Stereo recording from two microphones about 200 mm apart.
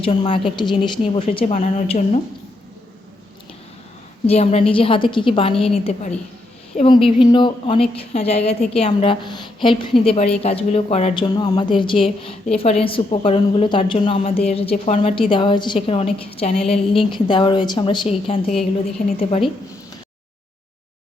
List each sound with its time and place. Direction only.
0.0 s a woman's voice: 25° left (ahead or behind)
1.5 s a woman's voice: 40° left (ahead or behind)
1.9 s a woman's voice: 30° left (ahead or behind)
4.3 s a woman's voice: 30° left (ahead or behind)
18.4 s a woman's voice: centre (ahead or behind)